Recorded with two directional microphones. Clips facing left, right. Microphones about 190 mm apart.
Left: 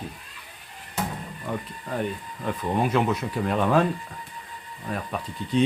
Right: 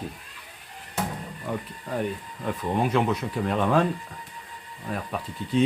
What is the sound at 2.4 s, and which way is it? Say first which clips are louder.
Speech: left 1 dB; centre (ahead or behind).